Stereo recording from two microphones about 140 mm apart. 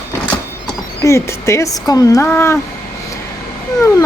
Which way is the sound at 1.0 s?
20° left (ahead or behind).